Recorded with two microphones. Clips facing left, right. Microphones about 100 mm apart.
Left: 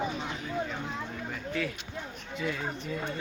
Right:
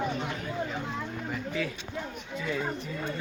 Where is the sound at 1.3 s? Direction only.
5° right (ahead or behind).